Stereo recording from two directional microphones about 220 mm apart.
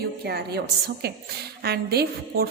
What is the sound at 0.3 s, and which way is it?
A woman's voice, 45° right (ahead or behind).